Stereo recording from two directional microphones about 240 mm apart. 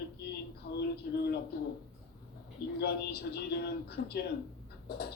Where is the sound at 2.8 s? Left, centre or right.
Left.